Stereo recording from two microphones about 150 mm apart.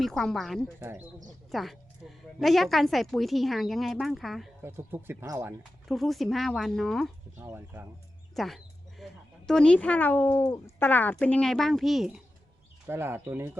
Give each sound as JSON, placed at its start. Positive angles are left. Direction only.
{"t": 0.0, "sound": "a woman's voice", "side_deg": 5}
{"t": 0.8, "sound": "speech", "side_deg": -15}
{"t": 1.5, "sound": "a woman's voice", "side_deg": 0}
{"t": 4.6, "sound": "speech", "side_deg": -15}
{"t": 5.9, "sound": "a woman's voice", "side_deg": 0}
{"t": 7.3, "sound": "speech", "side_deg": -15}
{"t": 8.4, "sound": "sheep", "side_deg": 0}
{"t": 9.5, "sound": "speech", "side_deg": 5}
{"t": 12.9, "sound": "speech", "side_deg": -15}